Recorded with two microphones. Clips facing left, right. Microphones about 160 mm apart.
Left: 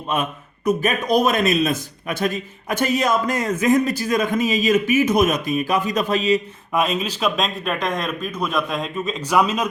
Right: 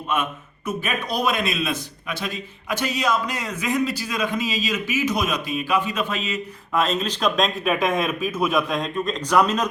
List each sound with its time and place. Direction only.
0.1 s a man's voice: 35° left (ahead or behind)
6.7 s speech: 10° left (ahead or behind)